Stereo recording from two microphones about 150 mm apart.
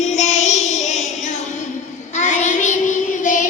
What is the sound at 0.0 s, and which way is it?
Child singing, 50° left (ahead or behind).